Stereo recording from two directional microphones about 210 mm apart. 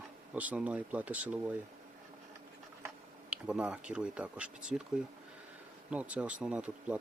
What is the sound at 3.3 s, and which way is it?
Speech, 5° right (ahead or behind).